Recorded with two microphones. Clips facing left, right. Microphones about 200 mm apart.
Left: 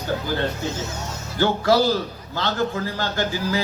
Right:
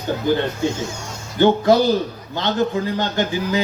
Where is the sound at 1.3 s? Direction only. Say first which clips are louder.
Right 4 dB; 20° right (ahead or behind).